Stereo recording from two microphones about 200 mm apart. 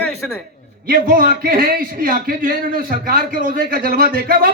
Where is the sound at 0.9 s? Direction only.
45° right (ahead or behind).